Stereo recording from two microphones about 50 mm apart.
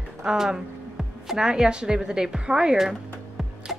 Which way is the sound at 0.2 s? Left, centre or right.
Centre.